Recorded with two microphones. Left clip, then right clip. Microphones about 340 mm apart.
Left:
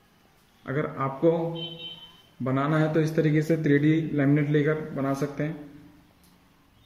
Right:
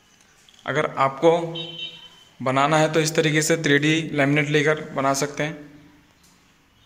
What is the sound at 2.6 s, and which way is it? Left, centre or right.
A man's voice, right.